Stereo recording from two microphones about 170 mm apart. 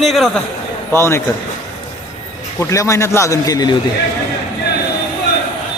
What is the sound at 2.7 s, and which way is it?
A man's voice, 20° left (ahead or behind).